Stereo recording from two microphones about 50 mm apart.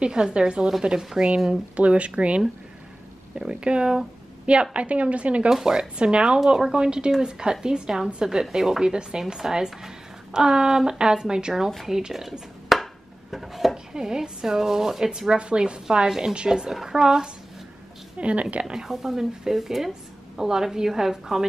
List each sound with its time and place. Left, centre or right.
0.0 s a woman's voice: centre
5.5 s a woman's voice: centre
13.9 s a woman's voice: centre
18.1 s a woman's voice: right
18.7 s a woman's voice: centre